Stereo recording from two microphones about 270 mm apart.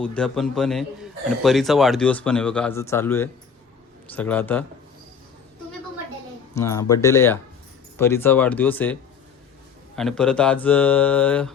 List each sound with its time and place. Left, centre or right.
0.0 s speech: centre
6.5 s speech: centre